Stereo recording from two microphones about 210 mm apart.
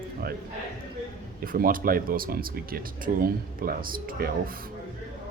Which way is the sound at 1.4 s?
45° right (ahead or behind).